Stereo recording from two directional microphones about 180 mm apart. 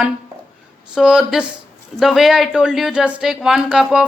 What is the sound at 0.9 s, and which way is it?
Speech, 5° right (ahead or behind).